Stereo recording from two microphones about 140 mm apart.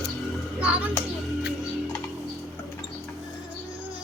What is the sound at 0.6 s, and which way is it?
Speech, 10° right (ahead or behind).